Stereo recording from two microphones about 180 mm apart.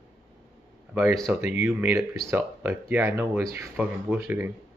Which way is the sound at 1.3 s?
5° right (ahead or behind).